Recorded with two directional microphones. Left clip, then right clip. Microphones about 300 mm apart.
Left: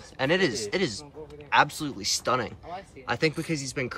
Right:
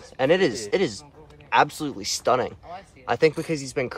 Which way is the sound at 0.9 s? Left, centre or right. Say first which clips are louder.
Left 2 dB; centre.